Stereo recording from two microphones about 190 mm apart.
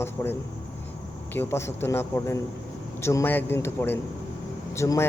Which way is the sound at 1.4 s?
15° left (ahead or behind).